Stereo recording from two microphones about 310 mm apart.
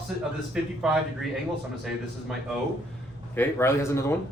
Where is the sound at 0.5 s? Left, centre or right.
Centre.